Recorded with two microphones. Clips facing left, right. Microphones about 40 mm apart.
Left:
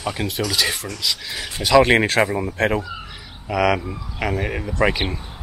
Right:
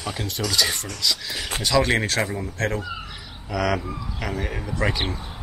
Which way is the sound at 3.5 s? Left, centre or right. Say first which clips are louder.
Left 5 dB; centre.